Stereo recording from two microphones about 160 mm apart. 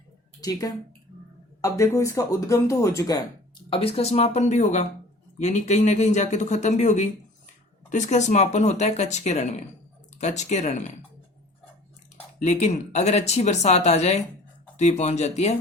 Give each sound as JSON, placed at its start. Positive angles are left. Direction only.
{"t": 0.4, "sound": "speech", "side_deg": 25}
{"t": 3.7, "sound": "speech", "side_deg": 35}
{"t": 12.4, "sound": "speech", "side_deg": 45}